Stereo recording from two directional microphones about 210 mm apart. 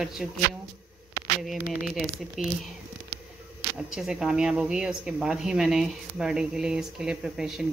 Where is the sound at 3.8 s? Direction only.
Centre (ahead or behind).